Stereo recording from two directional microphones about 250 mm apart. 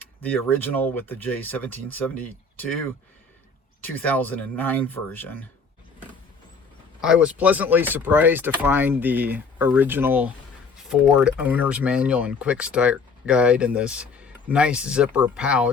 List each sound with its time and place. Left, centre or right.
0.0 s speech: centre
3.8 s speech: centre
7.0 s speech: centre